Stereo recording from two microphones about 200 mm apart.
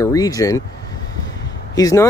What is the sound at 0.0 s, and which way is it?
Speech, 15° left (ahead or behind).